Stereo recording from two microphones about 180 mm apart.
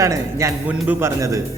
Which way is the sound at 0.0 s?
15° right (ahead or behind).